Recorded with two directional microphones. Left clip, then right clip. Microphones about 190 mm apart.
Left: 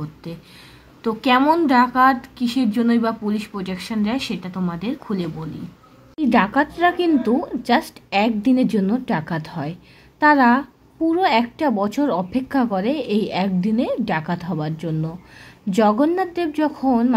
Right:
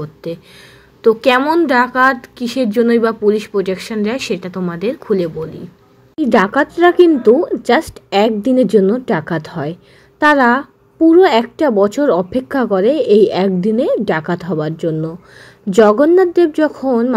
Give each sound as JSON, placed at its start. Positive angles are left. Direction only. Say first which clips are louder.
{"t": 0.0, "sound": "speech", "louder": "right 10 dB", "side_deg": -20}